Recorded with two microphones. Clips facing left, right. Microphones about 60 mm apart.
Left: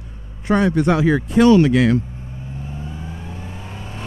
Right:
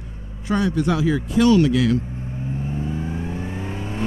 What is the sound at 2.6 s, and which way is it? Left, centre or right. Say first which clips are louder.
Vehicle: right 6 dB; right.